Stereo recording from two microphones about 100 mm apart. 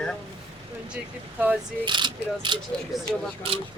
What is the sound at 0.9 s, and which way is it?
Speech, 15° right (ahead or behind).